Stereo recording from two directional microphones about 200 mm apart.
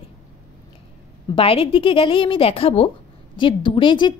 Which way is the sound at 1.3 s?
30° left (ahead or behind).